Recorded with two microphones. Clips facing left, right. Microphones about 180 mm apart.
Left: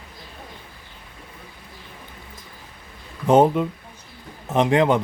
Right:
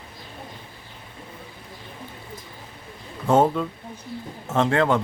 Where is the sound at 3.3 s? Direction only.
20° left (ahead or behind).